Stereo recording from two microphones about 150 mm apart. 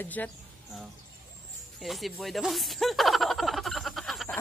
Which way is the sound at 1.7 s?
Centre (ahead or behind).